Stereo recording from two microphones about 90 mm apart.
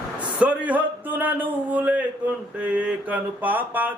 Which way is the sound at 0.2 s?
15° right (ahead or behind).